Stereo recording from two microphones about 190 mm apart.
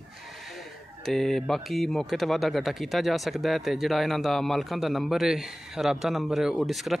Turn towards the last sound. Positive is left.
turn(degrees=0)  # may be behind; listen again after turning